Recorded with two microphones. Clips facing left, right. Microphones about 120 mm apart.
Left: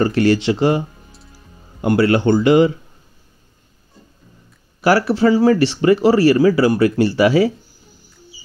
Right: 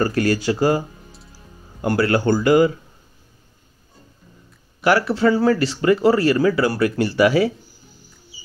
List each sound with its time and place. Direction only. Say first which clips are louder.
0.0 s speech: left 4 dB; 25° left (ahead or behind)
4.8 s speech: left 3 dB; 30° left (ahead or behind)